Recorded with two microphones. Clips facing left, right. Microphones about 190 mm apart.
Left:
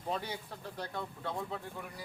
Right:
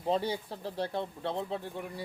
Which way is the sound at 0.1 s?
30° right (ahead or behind).